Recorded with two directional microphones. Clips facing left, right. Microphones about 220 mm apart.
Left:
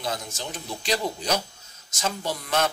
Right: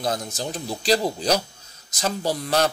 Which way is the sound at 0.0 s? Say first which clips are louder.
Right 5 dB; 40° right (ahead or behind).